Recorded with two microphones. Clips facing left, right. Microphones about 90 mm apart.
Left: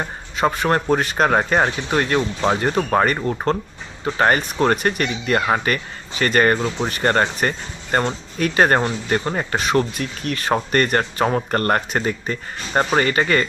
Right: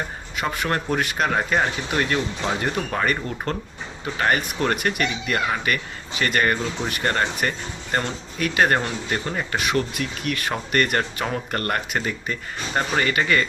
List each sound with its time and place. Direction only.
0.3 s speech: 30° left (ahead or behind)